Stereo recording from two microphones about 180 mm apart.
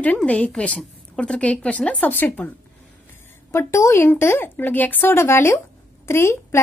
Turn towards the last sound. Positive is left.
turn(degrees=15)  # may be behind; listen again after turning